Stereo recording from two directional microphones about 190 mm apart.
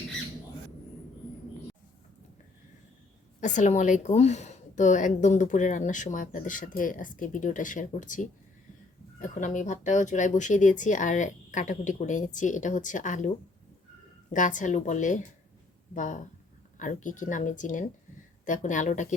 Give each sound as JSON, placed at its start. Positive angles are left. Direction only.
{"t": 3.4, "sound": "a woman's voice", "side_deg": 40}
{"t": 14.3, "sound": "a woman's voice", "side_deg": 40}